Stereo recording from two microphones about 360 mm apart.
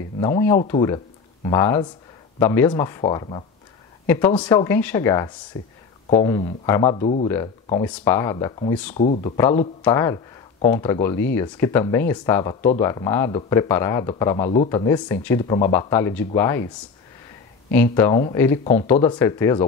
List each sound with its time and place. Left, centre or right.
0.2 s speech: centre
8.9 s speech: centre
17.9 s speech: centre